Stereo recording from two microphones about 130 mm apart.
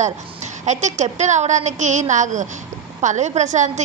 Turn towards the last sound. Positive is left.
turn(degrees=-65)  # may be behind; listen again after turning